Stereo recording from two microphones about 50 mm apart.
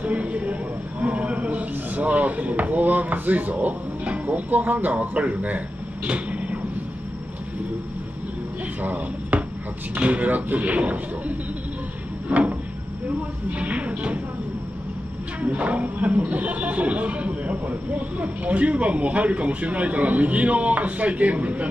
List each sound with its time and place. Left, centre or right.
0.0 s a sound: right
1.0 s speech: right
6.0 s vehicle: right
8.8 s speech: right
12.3 s cupboard open or close: right
13.5 s speech: right
15.4 s speech: right